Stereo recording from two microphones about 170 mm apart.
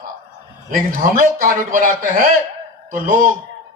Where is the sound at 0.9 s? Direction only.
55° right (ahead or behind).